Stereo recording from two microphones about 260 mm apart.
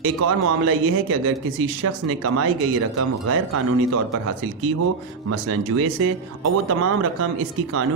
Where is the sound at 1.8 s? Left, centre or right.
Right.